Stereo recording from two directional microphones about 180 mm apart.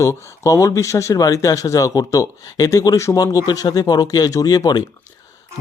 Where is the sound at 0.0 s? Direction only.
15° left (ahead or behind).